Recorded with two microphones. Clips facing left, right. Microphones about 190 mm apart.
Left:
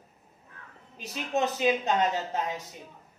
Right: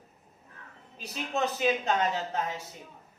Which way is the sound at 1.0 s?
15° left (ahead or behind).